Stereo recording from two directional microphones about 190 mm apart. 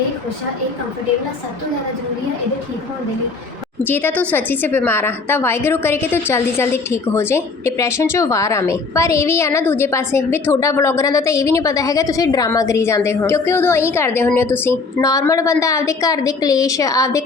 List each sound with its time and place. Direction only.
3.8 s a woman's voice: 10° left (ahead or behind)